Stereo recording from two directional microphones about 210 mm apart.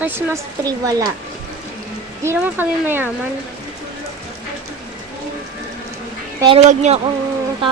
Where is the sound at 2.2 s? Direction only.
10° right (ahead or behind).